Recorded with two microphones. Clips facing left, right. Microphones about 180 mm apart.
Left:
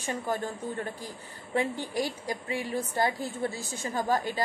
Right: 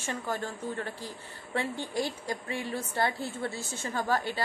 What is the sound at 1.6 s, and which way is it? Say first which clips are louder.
A woman's voice: left 2 dB; 15° left (ahead or behind).